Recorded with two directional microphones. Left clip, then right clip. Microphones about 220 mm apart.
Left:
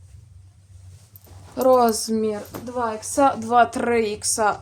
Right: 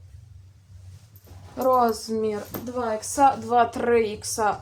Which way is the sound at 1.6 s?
45° left (ahead or behind).